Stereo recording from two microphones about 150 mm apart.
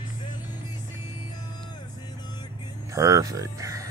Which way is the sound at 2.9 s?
20° right (ahead or behind).